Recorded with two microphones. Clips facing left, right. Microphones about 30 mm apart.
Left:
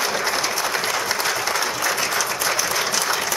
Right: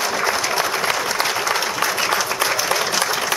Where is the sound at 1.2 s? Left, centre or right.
Centre.